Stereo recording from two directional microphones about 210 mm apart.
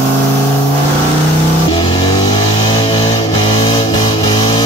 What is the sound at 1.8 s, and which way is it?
Music, 20° left (ahead or behind).